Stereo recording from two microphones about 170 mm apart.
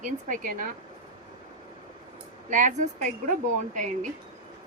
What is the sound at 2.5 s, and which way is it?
Speech, 50° right (ahead or behind).